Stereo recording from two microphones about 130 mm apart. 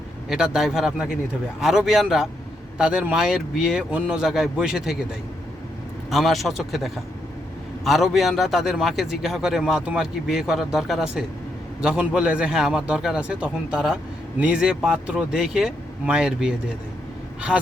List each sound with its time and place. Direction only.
0.3 s a man's voice: 5° right (ahead or behind)
6.1 s a man's voice: centre (ahead or behind)